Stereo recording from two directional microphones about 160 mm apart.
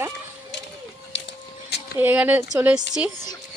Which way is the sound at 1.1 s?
90° left.